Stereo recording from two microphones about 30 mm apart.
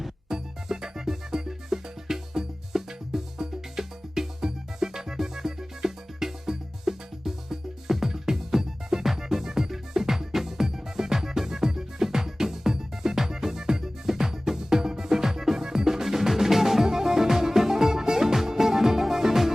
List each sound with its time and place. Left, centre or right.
0.3 s music: centre
16.8 s music: centre